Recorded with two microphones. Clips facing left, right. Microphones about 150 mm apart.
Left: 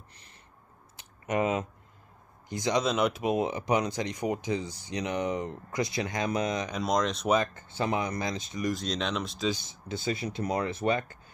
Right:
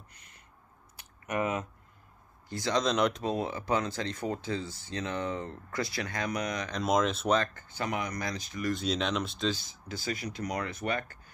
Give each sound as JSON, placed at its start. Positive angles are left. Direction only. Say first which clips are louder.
{"t": 0.1, "sound": "a sound", "louder": "left 2 dB", "side_deg": 30}
{"t": 2.5, "sound": "speech", "louder": "left 2 dB", "side_deg": 15}
{"t": 2.8, "sound": "speech", "louder": "right 2 dB", "side_deg": 5}
{"t": 6.7, "sound": "speech", "louder": "even", "side_deg": 0}
{"t": 7.5, "sound": "speech", "louder": "left 4 dB", "side_deg": 25}
{"t": 8.7, "sound": "speech", "louder": "right 1 dB", "side_deg": 0}
{"t": 9.5, "sound": "speech", "louder": "left 2 dB", "side_deg": 20}